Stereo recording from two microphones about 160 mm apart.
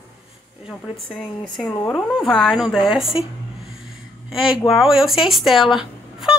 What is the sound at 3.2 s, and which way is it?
Speech, 30° left (ahead or behind).